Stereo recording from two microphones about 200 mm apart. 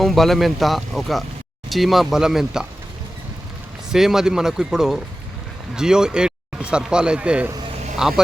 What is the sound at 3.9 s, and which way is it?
Speech, centre (ahead or behind).